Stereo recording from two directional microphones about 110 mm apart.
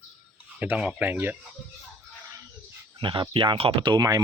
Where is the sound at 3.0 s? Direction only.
50° right (ahead or behind).